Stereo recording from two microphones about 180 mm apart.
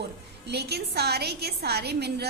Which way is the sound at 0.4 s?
65° right (ahead or behind).